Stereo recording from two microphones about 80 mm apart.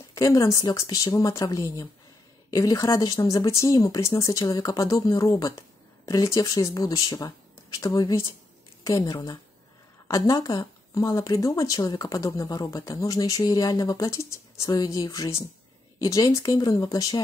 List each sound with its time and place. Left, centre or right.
0.1 s speech: left
3.4 s speech: left
14.7 s speech: left